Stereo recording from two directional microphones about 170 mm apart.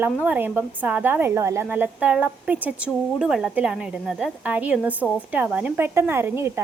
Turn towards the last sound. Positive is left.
turn(degrees=-15)  # may be behind; listen again after turning